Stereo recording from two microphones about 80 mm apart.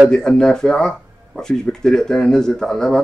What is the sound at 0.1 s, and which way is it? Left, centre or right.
Speech, centre.